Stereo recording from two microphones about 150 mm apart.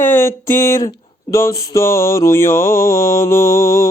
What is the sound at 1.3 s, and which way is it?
Mantra, 20° left (ahead or behind).